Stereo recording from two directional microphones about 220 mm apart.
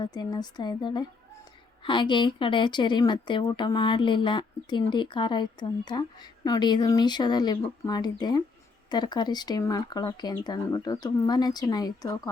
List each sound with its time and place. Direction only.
0.0 s speech: 20° left (ahead or behind)